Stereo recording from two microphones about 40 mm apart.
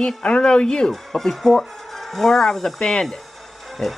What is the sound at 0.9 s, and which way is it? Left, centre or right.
Speech, centre.